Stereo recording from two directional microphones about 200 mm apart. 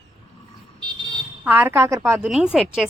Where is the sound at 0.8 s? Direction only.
25° right (ahead or behind).